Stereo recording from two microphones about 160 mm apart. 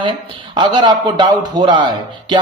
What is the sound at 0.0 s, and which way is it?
A man's voice, 30° right (ahead or behind).